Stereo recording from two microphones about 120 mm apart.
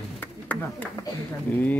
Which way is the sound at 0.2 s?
15° left (ahead or behind).